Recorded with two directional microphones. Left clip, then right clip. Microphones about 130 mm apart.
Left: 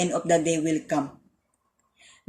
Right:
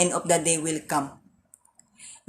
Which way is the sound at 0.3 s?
20° left (ahead or behind).